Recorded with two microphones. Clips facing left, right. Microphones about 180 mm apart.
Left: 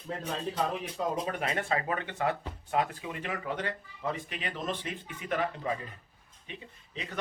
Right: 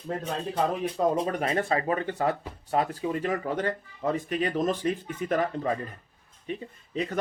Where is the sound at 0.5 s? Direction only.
45° right (ahead or behind).